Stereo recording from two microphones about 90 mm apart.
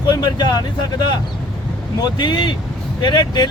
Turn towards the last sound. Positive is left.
turn(degrees=60)  # may be behind; listen again after turning